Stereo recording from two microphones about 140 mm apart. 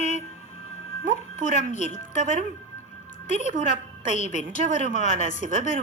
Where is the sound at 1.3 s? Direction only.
55° left (ahead or behind).